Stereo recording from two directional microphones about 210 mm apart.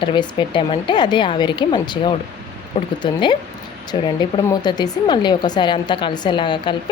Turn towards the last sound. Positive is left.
turn(degrees=20)  # may be behind; listen again after turning